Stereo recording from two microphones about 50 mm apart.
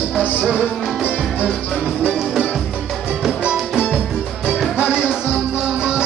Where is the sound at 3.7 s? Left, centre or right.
Centre.